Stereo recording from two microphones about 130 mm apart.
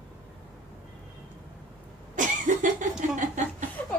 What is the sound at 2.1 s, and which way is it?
Cough, 80° right.